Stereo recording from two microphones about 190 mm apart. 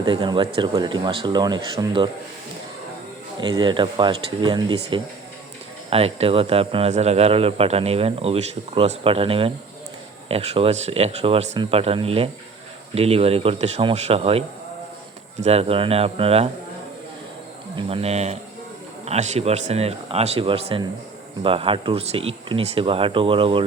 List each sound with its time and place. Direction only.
0.0 s speech: 25° right (ahead or behind)
3.4 s speech: 25° right (ahead or behind)
17.7 s speech: 30° right (ahead or behind)